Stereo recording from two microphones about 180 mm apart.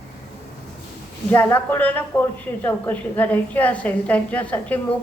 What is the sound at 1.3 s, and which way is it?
A woman's voice, 10° left (ahead or behind).